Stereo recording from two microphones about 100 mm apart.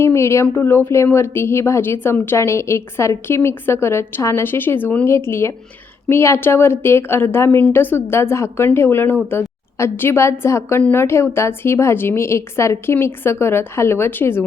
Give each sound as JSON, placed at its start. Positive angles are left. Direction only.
{"t": 0.0, "sound": "a woman's voice", "side_deg": 25}